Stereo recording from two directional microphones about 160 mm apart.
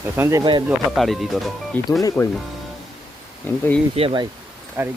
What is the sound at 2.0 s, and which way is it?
Speech, 20° left (ahead or behind).